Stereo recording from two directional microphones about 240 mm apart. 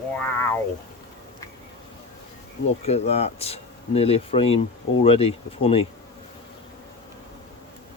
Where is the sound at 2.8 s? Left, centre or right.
Left.